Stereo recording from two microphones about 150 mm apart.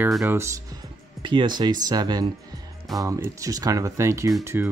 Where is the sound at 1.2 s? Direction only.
30° right (ahead or behind).